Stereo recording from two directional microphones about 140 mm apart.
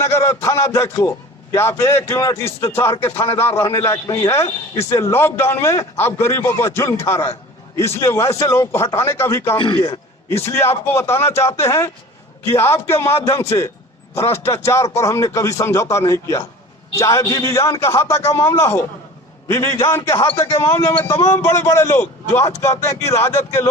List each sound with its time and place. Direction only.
0.0 s a man's voice: 20° left (ahead or behind)